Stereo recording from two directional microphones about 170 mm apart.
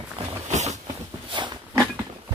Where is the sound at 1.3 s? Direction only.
25° right (ahead or behind).